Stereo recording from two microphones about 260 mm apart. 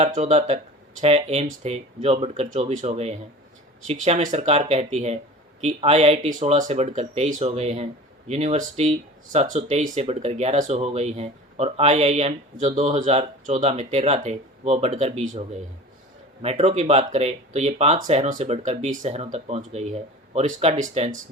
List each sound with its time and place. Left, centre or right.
0.0 s speech: right